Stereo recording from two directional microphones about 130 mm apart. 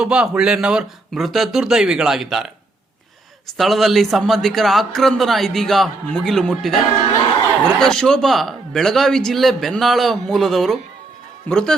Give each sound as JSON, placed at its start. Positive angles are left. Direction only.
{"t": 0.0, "sound": "a man's voice", "side_deg": -5}
{"t": 3.6, "sound": "a man's voice", "side_deg": 0}